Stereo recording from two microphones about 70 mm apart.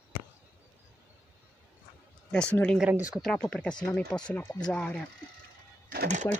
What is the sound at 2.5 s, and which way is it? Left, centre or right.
Speech, centre.